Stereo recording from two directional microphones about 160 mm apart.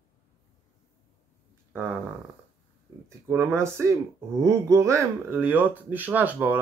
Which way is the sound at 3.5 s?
15° right (ahead or behind).